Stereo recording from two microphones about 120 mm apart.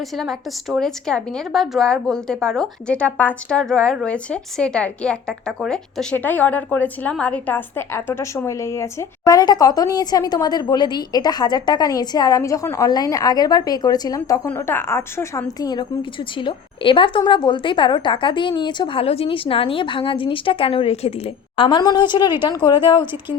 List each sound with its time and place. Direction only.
0.2 s a woman's voice: centre (ahead or behind); by 14.4 s 30° left (ahead or behind)
14.4 s a woman's voice: 20° left (ahead or behind); by 19.0 s 40° left (ahead or behind)
19.0 s a woman's voice: 55° left (ahead or behind)
21.5 s speech: 45° left (ahead or behind)